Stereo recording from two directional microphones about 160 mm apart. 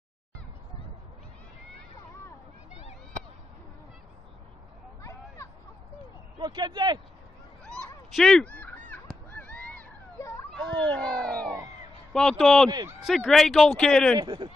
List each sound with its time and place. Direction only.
2.7 s a sound: 45° left (ahead or behind)
6.3 s speech: 25° right (ahead or behind)
8.2 s fowl: 5° left (ahead or behind)
9.3 s a sound: 10° left (ahead or behind)
10.5 s cat: 5° left (ahead or behind)
12.1 s speech: 5° left (ahead or behind)
14.1 s speech: 30° right (ahead or behind)